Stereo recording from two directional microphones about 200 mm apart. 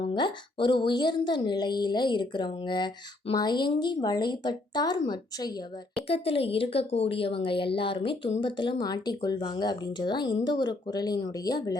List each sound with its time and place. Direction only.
0.1 s a woman's voice: 25° left (ahead or behind)